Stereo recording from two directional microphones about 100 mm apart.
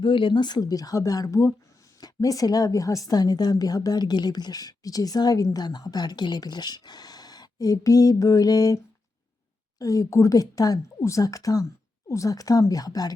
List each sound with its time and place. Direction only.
0.0 s a woman's voice: 55° left (ahead or behind); by 13.1 s 40° left (ahead or behind)